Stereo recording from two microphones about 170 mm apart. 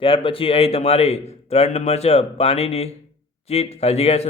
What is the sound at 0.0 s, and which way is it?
A man's voice, 30° left (ahead or behind).